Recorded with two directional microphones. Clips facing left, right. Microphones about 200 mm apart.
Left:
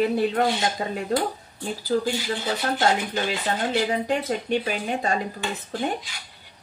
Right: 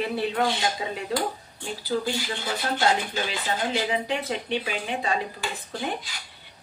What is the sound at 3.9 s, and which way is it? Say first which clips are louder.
A woman's voice: left 3 dB; 45° left (ahead or behind).